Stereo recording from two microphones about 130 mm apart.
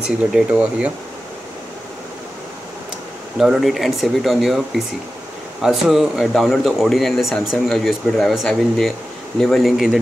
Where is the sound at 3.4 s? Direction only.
Centre (ahead or behind).